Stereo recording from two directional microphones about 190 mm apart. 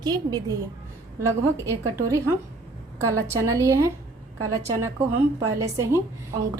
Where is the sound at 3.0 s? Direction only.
15° right (ahead or behind).